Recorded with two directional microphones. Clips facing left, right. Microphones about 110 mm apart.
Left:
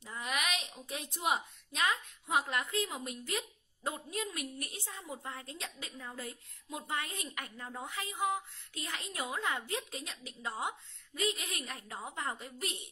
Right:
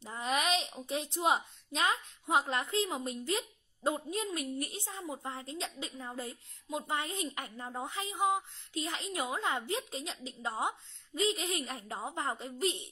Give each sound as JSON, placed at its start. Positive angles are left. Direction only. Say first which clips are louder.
{"t": 0.0, "sound": "speech", "louder": "right 4 dB", "side_deg": -30}